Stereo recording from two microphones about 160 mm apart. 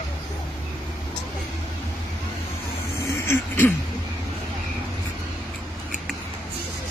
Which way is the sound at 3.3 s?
10° left (ahead or behind).